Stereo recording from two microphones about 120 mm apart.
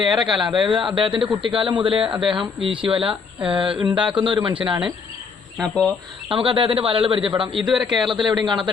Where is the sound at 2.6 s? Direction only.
45° right (ahead or behind).